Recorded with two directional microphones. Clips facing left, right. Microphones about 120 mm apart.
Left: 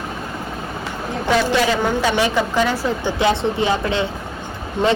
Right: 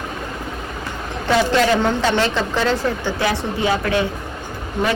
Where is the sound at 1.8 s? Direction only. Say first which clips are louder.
Even; 10° left (ahead or behind).